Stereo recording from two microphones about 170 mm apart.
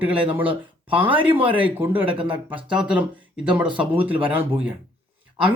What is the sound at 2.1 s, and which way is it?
Speech, 30° right (ahead or behind).